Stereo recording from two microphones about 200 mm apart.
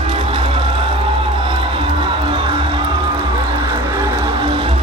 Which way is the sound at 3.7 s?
15° right (ahead or behind).